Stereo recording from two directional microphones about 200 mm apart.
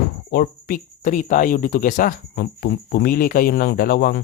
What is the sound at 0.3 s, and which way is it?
Speech, 50° left (ahead or behind).